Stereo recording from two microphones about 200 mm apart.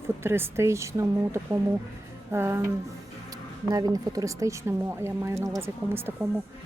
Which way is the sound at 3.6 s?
20° right (ahead or behind).